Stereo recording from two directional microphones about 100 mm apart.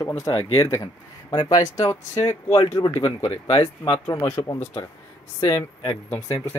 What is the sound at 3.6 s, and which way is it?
Speech, 55° left (ahead or behind).